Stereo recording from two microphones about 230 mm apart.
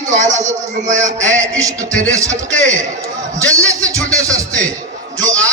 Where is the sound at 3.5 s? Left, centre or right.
Centre.